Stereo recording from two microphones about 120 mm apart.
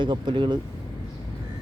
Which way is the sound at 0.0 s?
40° right (ahead or behind).